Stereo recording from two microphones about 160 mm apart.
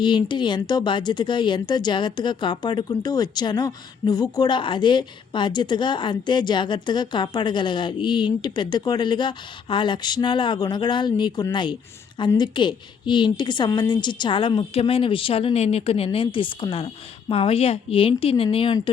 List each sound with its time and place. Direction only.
0.0 s a woman's voice: 30° left (ahead or behind)